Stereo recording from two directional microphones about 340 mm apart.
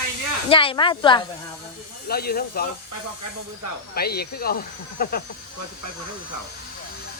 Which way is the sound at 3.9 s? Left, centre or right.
Left.